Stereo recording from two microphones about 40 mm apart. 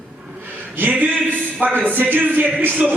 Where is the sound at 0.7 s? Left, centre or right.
Right.